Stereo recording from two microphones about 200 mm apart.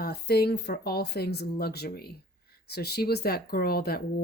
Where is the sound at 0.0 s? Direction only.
50° left (ahead or behind).